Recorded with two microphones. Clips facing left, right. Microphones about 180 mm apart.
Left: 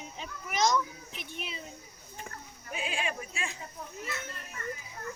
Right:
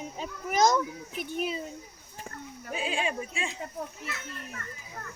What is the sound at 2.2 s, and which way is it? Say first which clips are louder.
Speech: right 7 dB; 30° right (ahead or behind).